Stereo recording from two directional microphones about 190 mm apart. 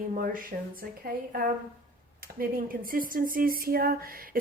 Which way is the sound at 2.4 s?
50° right (ahead or behind).